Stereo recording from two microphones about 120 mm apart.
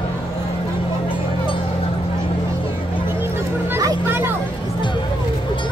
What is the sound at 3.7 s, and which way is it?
Music, 20° right (ahead or behind).